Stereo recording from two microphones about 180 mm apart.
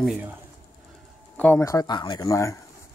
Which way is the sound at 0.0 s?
Centre (ahead or behind).